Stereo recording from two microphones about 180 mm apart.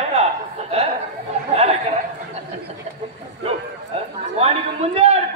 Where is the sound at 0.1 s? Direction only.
35° right (ahead or behind).